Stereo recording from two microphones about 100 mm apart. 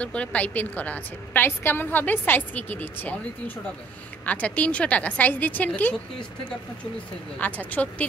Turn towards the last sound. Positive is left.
turn(degrees=15)  # may be behind; listen again after turning